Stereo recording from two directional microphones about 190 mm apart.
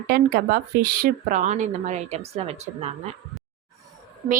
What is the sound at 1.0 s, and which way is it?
A woman's voice, 45° right (ahead or behind).